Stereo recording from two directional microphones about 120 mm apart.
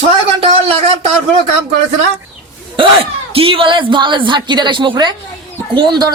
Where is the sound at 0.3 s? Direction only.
55° right (ahead or behind).